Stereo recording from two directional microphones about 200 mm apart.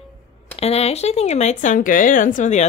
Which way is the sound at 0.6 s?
30° left (ahead or behind).